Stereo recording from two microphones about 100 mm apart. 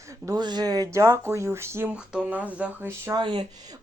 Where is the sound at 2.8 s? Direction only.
25° right (ahead or behind).